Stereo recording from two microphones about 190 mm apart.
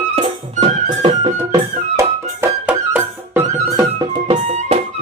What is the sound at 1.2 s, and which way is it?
Music, 20° right (ahead or behind).